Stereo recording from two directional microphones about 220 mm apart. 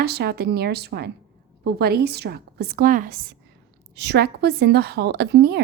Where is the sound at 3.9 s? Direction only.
50° right (ahead or behind).